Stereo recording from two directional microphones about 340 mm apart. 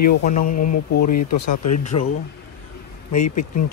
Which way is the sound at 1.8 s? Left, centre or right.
Centre.